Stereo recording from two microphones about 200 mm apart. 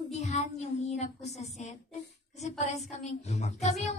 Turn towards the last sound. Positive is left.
turn(degrees=35)  # may be behind; listen again after turning